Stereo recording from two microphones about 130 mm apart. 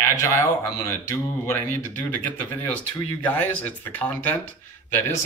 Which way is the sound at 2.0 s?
10° left (ahead or behind).